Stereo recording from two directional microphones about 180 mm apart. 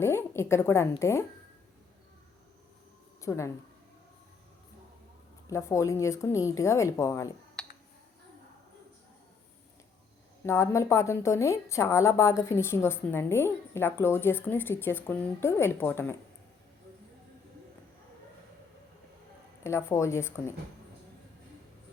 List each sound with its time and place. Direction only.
0.0 s a woman's voice: 15° left (ahead or behind)
3.2 s speech: 15° left (ahead or behind)
5.5 s a woman's voice: 15° left (ahead or behind)
7.6 s a sound: 5° left (ahead or behind)
10.4 s a woman's voice: 15° left (ahead or behind)
19.6 s a woman's voice: 15° left (ahead or behind)